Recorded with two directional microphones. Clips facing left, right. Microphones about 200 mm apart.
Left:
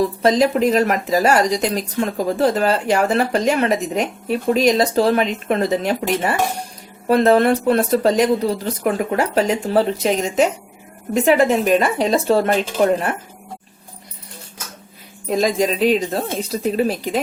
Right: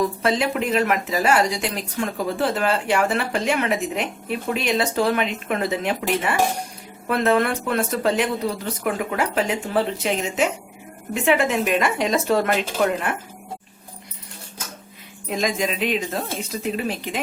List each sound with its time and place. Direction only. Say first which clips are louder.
0.0 s speech: left 5 dB; 35° left (ahead or behind)
15.3 s speech: left 6 dB; 35° left (ahead or behind)